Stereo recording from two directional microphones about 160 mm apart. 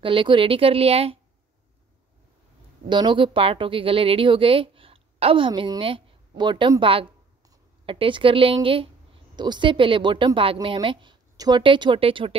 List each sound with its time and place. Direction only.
0.0 s a woman's voice: 30° right (ahead or behind)
2.9 s a woman's voice: 30° right (ahead or behind)